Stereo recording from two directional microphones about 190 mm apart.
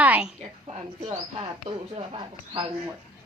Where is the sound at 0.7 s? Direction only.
30° right (ahead or behind).